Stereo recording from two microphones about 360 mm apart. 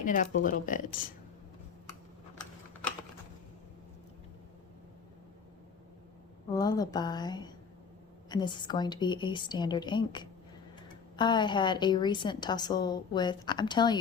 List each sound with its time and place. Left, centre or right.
0.0 s speech: left
6.5 s a woman's voice: centre